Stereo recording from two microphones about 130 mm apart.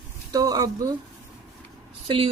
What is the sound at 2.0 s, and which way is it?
Speech, 40° right (ahead or behind).